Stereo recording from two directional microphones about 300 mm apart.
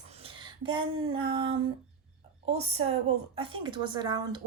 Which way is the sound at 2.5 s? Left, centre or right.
Centre.